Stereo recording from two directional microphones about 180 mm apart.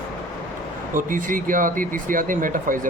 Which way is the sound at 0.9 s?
50° right (ahead or behind).